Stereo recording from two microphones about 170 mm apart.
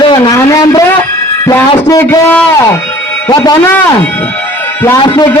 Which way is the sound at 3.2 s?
25° left (ahead or behind).